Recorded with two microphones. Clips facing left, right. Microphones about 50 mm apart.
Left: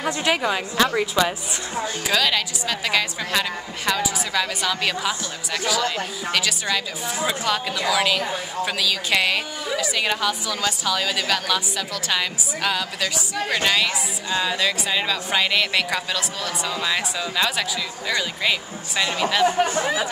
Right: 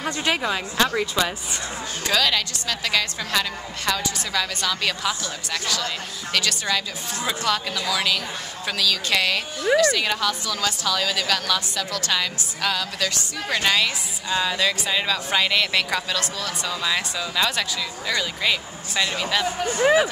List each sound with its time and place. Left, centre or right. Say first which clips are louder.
0.0 s a woman's voice: left 2 dB; centre
19.4 s speech: left 6 dB; left
19.8 s speech: right 6 dB; right